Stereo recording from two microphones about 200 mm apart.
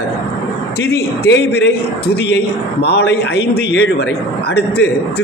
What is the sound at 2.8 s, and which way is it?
A man's voice, 55° left (ahead or behind).